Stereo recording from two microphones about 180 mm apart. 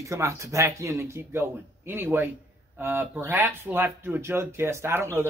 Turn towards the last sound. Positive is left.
turn(degrees=-15)  # may be behind; listen again after turning